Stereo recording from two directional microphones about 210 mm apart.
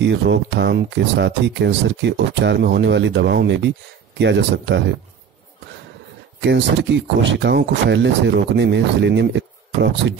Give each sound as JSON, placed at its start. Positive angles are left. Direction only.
{"t": 0.0, "sound": "speech", "side_deg": -55}
{"t": 6.4, "sound": "speech", "side_deg": -55}